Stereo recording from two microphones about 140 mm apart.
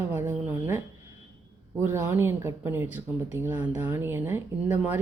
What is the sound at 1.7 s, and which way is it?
Speech, 15° right (ahead or behind).